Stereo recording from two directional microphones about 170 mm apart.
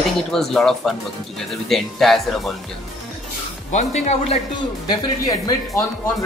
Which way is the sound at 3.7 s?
45° left (ahead or behind).